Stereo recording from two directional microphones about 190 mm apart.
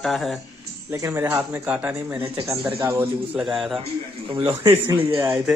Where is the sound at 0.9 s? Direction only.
15° right (ahead or behind).